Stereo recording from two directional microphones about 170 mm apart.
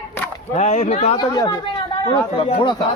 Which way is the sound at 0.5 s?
40° left (ahead or behind).